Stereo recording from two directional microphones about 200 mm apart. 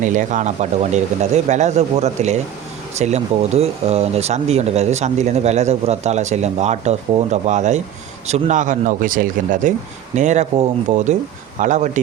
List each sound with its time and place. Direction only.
0.0 s speech: 40° right (ahead or behind)